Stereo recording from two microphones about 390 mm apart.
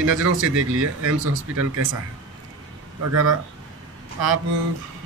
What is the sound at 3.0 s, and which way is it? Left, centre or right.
Speech, right.